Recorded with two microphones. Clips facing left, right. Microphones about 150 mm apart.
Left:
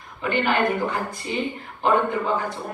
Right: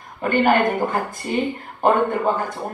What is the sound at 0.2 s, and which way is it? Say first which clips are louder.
A woman's voice: right 5 dB; 45° right (ahead or behind).